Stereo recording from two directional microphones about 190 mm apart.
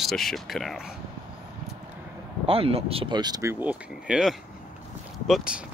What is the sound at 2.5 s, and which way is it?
Speech, 30° right (ahead or behind).